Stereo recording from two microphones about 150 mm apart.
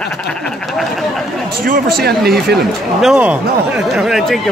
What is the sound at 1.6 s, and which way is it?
Speech, 75° right (ahead or behind).